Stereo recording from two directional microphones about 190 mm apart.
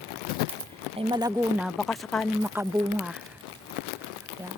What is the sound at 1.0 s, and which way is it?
Speech, 20° right (ahead or behind).